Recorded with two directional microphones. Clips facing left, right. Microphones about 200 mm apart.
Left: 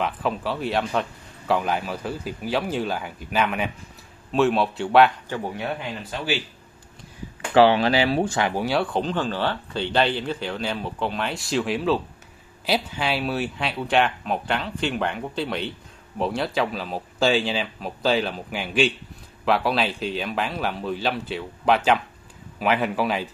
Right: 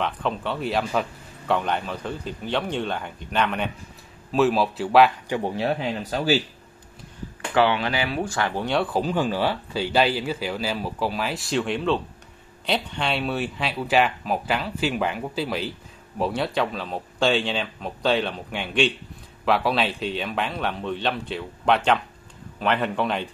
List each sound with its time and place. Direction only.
0.0 s speech: 5° left (ahead or behind)
5.4 s speech: 30° right (ahead or behind)
7.5 s speech: 35° left (ahead or behind)
8.4 s speech: 15° left (ahead or behind)
8.6 s speech: centre (ahead or behind)